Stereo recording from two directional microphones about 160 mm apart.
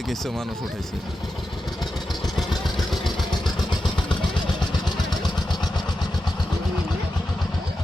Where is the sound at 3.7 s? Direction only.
30° left (ahead or behind).